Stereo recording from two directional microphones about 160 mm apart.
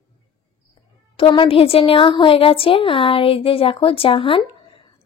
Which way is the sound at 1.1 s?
30° left (ahead or behind).